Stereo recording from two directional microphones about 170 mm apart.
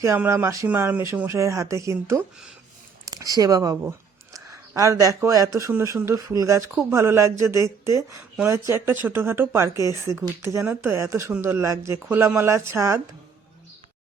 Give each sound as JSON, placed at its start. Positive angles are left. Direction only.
{"t": 0.0, "sound": "speech", "side_deg": -15}